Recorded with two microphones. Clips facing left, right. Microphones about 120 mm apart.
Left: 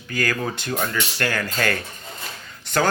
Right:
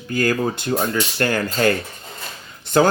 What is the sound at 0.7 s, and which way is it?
Speech, 30° right (ahead or behind).